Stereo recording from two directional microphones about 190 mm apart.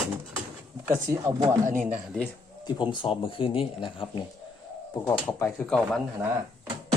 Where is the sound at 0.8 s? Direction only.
15° right (ahead or behind).